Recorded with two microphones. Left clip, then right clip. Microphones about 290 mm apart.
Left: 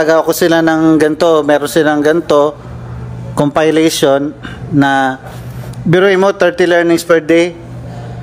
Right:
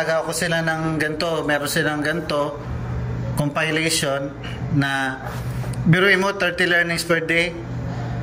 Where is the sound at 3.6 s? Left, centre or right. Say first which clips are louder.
Left 11 dB; centre.